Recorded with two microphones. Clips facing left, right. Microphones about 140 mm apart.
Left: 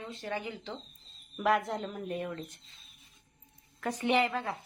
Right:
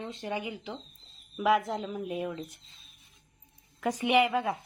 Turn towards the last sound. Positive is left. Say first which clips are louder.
# right 4 dB
turn(degrees=-15)  # may be behind; listen again after turning